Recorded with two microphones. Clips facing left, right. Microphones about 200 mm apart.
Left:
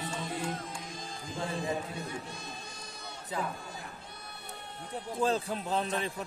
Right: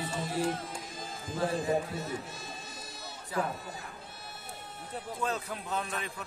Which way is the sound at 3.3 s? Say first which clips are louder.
Right 3 dB; 20° left (ahead or behind).